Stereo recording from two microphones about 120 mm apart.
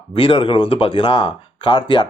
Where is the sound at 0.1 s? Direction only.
45° left (ahead or behind).